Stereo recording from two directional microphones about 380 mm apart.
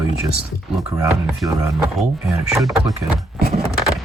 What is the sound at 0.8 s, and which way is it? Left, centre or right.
Speech, centre.